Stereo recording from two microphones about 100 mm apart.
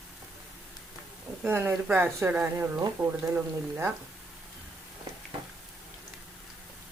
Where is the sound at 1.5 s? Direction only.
20° right (ahead or behind).